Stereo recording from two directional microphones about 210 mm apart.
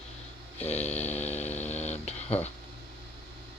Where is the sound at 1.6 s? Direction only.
30° left (ahead or behind).